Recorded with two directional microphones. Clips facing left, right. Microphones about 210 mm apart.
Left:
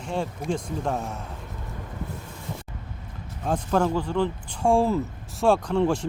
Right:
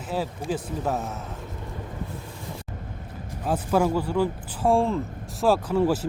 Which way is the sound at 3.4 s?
5° right (ahead or behind).